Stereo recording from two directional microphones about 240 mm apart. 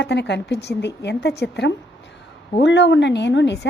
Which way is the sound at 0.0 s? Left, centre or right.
Left.